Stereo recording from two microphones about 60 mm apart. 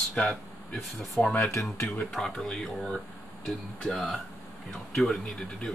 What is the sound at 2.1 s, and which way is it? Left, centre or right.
Speech, centre.